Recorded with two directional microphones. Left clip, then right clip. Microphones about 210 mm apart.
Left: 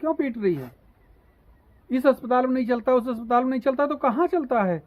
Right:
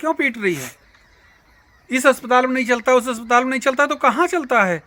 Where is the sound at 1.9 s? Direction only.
20° right (ahead or behind).